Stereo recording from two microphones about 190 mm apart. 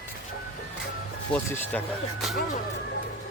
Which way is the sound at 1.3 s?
10° left (ahead or behind).